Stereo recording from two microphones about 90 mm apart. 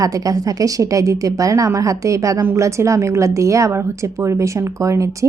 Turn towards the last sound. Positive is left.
turn(degrees=-35)  # may be behind; listen again after turning